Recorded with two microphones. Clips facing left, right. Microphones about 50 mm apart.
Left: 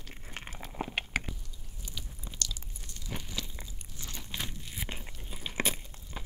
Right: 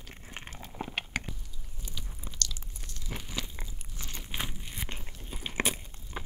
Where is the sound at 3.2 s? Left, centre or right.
Right.